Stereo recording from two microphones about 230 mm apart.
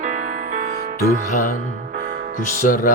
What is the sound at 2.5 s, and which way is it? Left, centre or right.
Music, left.